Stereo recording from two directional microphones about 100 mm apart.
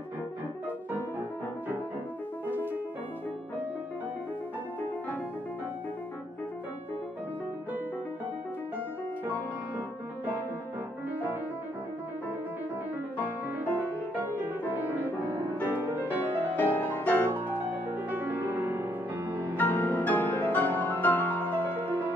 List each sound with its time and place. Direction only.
2.5 s music: 20° right (ahead or behind)
14.2 s music: 20° right (ahead or behind)
16.5 s music: 20° left (ahead or behind)
17.3 s music: 15° right (ahead or behind)
19.5 s music: 15° left (ahead or behind)